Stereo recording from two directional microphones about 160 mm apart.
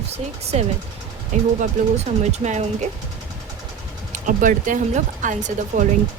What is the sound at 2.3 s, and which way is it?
Speech, 45° right (ahead or behind).